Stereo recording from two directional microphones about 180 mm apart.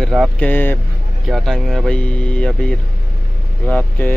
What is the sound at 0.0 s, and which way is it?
Speech, 5° right (ahead or behind).